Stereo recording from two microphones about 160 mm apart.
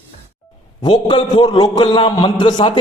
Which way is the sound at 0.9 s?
30° left (ahead or behind).